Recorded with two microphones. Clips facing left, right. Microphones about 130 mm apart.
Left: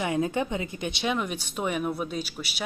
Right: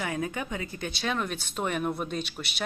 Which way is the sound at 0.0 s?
25° left (ahead or behind).